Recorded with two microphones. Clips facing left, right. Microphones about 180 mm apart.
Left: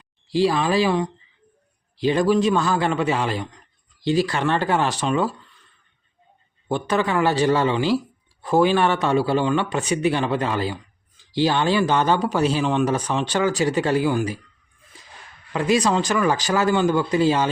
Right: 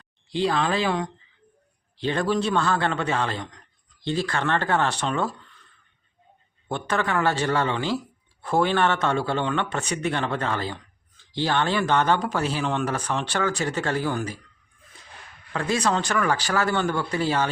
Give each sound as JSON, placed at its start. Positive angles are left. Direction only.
{"t": 0.3, "sound": "speech", "side_deg": 5}
{"t": 6.7, "sound": "speech", "side_deg": 10}
{"t": 15.5, "sound": "speech", "side_deg": 15}